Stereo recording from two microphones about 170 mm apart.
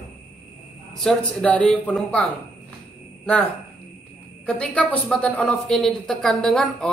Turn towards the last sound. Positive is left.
turn(degrees=5)  # may be behind; listen again after turning